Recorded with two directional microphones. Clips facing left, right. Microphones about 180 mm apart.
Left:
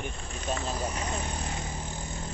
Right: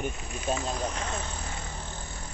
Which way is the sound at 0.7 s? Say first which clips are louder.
Even; 10° left (ahead or behind).